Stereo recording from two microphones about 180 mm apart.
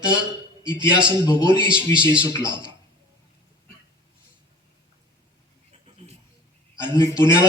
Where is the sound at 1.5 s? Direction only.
25° right (ahead or behind).